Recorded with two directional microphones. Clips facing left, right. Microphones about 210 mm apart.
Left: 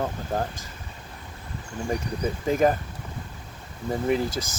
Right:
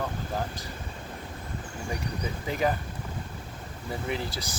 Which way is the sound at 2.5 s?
45° left (ahead or behind).